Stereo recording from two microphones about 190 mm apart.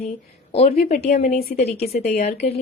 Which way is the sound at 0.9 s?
40° left (ahead or behind).